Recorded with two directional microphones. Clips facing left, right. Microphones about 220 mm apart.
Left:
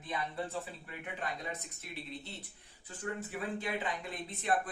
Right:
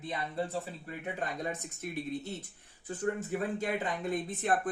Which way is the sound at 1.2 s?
50° right (ahead or behind).